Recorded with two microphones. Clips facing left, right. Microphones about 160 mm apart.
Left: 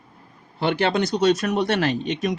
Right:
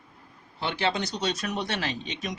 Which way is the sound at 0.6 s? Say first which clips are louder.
Left 7 dB; 55° left (ahead or behind).